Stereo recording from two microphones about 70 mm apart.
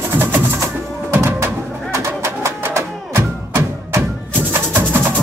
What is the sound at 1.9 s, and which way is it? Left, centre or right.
Music, right.